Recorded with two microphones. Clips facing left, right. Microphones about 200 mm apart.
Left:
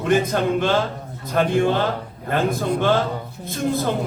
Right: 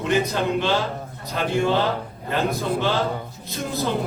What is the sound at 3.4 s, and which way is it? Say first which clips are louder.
Speech: left 9 dB; 50° left (ahead or behind).